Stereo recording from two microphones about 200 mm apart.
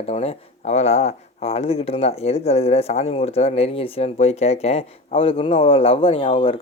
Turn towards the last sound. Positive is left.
turn(degrees=25)  # may be behind; listen again after turning